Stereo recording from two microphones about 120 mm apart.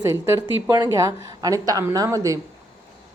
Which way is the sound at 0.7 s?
30° right (ahead or behind).